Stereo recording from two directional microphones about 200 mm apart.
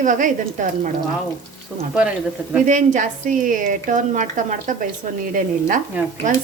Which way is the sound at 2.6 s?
40° right (ahead or behind).